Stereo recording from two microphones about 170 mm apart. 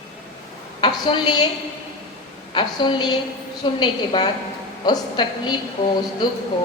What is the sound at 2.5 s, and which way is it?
A woman's voice, 30° left (ahead or behind).